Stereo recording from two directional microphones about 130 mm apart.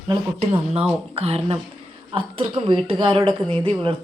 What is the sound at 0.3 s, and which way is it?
A woman's voice, 50° right (ahead or behind).